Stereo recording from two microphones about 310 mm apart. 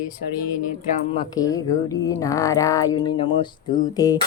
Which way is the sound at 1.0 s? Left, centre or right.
Centre.